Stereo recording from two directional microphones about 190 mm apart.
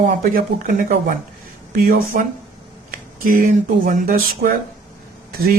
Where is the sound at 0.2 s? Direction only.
50° right (ahead or behind).